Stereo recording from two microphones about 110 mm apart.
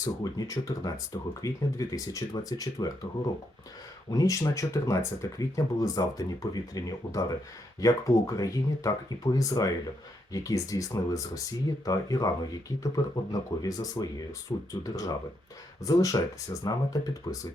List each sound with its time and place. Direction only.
0.0 s speech: 35° left (ahead or behind)
4.1 s speech: 30° left (ahead or behind)